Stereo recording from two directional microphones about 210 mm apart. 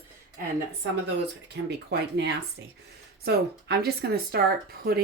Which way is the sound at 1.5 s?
55° right (ahead or behind).